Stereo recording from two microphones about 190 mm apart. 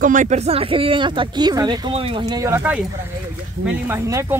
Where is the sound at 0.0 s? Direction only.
40° right (ahead or behind); by 2.8 s 10° right (ahead or behind).